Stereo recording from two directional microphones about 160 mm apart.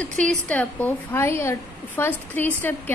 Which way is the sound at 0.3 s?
10° left (ahead or behind).